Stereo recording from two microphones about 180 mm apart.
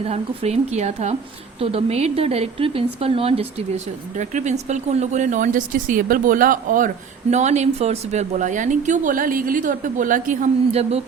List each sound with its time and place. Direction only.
0.0 s speech: 35° right (ahead or behind)